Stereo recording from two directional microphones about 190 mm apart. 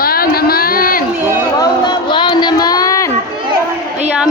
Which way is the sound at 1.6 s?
25° left (ahead or behind).